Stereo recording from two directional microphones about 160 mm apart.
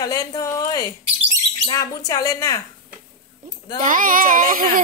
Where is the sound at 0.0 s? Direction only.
25° left (ahead or behind).